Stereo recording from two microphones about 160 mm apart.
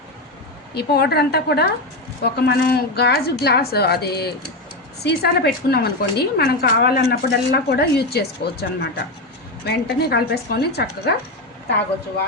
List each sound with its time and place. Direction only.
0.7 s a woman's voice: 90° left